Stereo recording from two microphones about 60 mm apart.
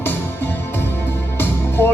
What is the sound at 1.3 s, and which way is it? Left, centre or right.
Music, left.